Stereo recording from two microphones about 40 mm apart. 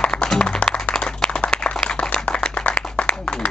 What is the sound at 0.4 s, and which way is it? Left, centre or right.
Music, left.